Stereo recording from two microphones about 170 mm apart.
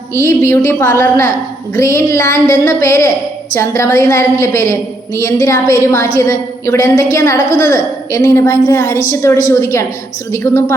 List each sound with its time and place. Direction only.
0.1 s a woman's voice: 15° left (ahead or behind)